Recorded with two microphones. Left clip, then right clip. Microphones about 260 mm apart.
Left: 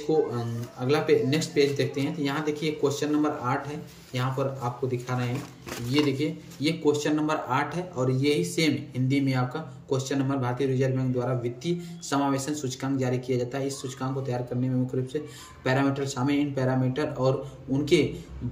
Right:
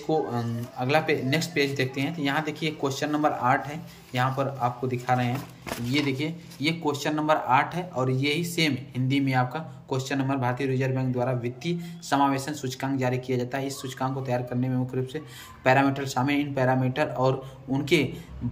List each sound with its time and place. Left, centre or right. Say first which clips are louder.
0.1 s speech: left 1 dB; centre